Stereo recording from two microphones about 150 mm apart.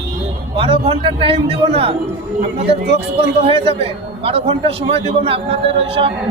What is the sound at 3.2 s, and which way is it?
A man's voice, 40° right (ahead or behind).